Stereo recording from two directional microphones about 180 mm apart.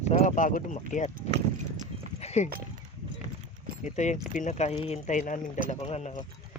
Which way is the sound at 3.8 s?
40° left (ahead or behind).